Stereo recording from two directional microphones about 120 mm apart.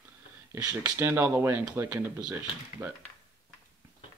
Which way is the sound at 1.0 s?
20° right (ahead or behind).